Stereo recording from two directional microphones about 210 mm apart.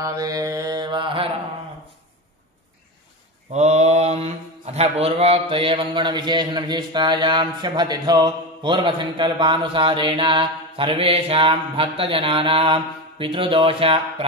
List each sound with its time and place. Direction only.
0.0 s mantra: 15° right (ahead or behind)
3.5 s speech: 30° right (ahead or behind)